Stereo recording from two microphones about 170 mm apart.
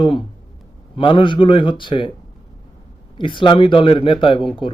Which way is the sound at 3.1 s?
30° left (ahead or behind).